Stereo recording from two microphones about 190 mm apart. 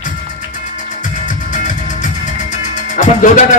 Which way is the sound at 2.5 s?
40° left (ahead or behind).